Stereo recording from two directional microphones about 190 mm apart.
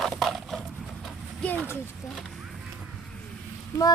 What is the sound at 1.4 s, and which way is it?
Speech, 10° left (ahead or behind).